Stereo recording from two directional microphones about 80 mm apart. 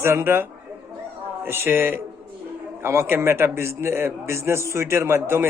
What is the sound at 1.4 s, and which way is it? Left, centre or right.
A man's voice, right.